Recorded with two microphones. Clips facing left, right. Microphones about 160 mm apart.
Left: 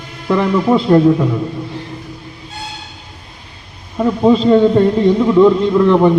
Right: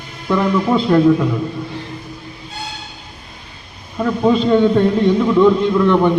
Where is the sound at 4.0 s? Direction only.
20° left (ahead or behind).